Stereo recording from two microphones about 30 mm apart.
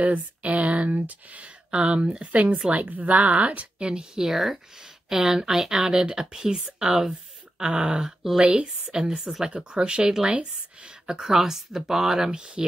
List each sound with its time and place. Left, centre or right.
0.0 s speech: right
1.7 s speech: right
2.3 s speech: right
3.8 s speech: right
4.2 s speech: centre
7.5 s speech: right
10.9 s a woman's voice: right
11.3 s speech: centre
12.3 s speech: right